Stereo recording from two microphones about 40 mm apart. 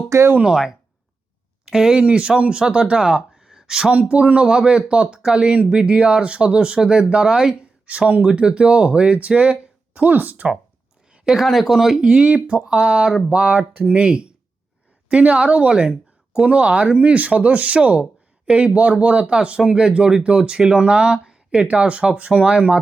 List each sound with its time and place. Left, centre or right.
0.4 s speech: centre
2.0 s speech: right
3.3 s a sound: centre
4.1 s speech: right
10.1 s speech: right
11.4 s speech: centre
11.7 s speech: centre; by 13.1 s right
13.5 s speech: right; by 21.7 s centre
21.7 s speech: right